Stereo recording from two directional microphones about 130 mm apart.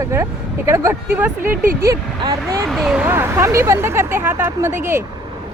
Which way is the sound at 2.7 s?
Centre (ahead or behind).